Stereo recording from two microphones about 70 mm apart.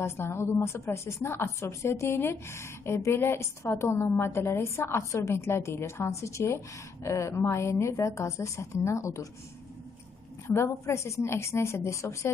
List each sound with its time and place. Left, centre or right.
0.0 s a woman's voice: left
10.4 s speech: left